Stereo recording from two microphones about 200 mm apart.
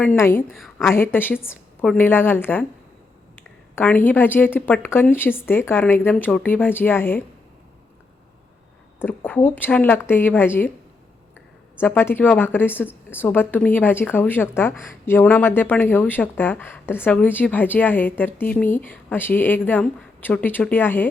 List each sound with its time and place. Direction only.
0.0 s a woman's voice: 10° left (ahead or behind)
0.5 s a woman's voice: centre (ahead or behind)
1.1 s a woman's voice: 10° left (ahead or behind)
9.0 s a woman's voice: 10° left (ahead or behind)
11.8 s a woman's voice: 10° left (ahead or behind)